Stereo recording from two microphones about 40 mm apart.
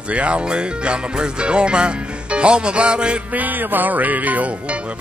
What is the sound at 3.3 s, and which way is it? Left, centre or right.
Music, right.